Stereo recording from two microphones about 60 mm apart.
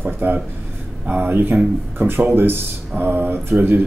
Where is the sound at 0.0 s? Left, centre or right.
Right.